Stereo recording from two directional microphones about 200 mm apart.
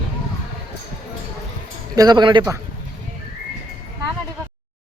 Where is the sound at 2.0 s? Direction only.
20° right (ahead or behind).